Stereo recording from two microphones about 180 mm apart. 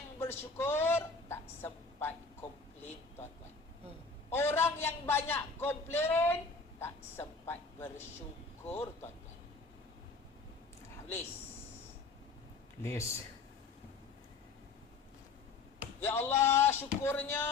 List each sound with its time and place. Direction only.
0.2 s a sound: 15° left (ahead or behind)
4.4 s a man's voice: 15° left (ahead or behind)
6.7 s a sound: 15° left (ahead or behind)
8.6 s speech: 10° left (ahead or behind)
12.8 s speech: 15° left (ahead or behind)
16.0 s speech: 10° left (ahead or behind)